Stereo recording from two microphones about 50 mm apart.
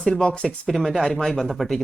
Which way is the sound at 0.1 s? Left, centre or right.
Centre.